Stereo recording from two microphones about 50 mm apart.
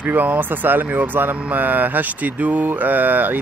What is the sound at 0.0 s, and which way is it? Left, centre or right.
Speech, right.